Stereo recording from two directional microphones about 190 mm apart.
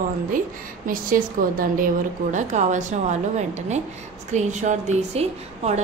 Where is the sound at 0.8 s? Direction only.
45° right (ahead or behind).